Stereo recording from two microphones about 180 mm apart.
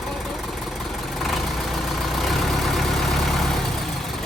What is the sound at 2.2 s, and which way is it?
Vehicle, centre (ahead or behind).